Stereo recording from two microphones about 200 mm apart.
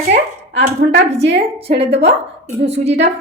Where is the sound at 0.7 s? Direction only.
35° right (ahead or behind).